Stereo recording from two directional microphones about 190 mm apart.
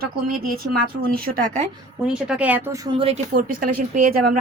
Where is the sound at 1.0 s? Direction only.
45° right (ahead or behind).